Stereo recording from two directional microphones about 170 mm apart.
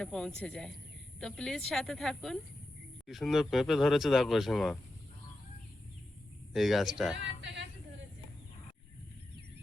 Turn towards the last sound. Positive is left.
turn(degrees=-90)